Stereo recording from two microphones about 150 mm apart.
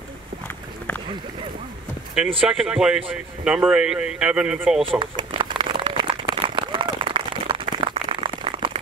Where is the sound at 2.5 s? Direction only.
5° right (ahead or behind).